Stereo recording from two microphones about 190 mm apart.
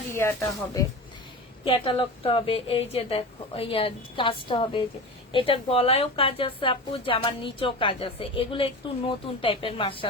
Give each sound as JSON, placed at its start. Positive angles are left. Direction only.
{"t": 0.1, "sound": "speech", "side_deg": 15}
{"t": 1.6, "sound": "speech", "side_deg": 30}